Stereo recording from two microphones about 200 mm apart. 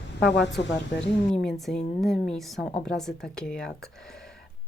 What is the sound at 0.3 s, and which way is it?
Speech, 60° left (ahead or behind).